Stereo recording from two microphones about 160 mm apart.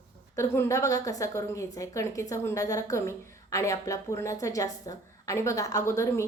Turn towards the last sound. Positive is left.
turn(degrees=15)  # may be behind; listen again after turning